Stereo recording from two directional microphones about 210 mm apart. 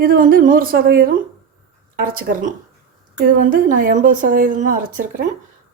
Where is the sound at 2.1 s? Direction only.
40° right (ahead or behind).